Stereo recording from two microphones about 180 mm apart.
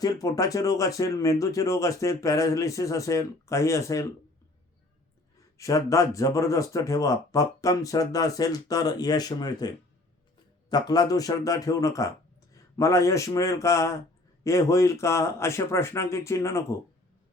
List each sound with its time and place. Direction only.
0.0 s speech: 20° left (ahead or behind)
5.5 s speech: 15° left (ahead or behind)